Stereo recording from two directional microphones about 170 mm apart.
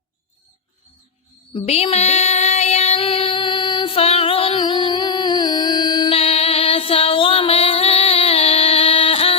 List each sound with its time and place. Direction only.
1.5 s child singing: 35° left (ahead or behind)